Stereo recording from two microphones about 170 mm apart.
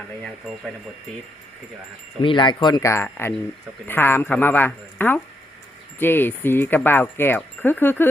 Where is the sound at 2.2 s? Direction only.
30° left (ahead or behind).